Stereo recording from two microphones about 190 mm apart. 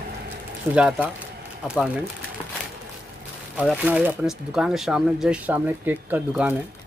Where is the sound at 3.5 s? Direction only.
5° right (ahead or behind).